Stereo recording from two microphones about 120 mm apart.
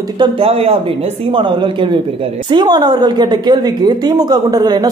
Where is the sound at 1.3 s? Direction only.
40° right (ahead or behind).